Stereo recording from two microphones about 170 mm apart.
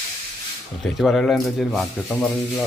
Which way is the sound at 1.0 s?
Centre (ahead or behind).